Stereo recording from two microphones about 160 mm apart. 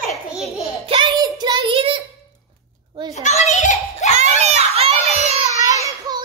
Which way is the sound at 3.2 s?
45° left (ahead or behind).